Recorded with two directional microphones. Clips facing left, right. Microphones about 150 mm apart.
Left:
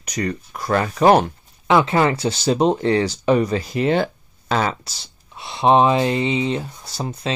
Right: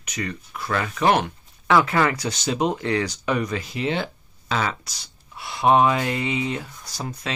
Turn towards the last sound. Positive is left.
turn(degrees=30)  # may be behind; listen again after turning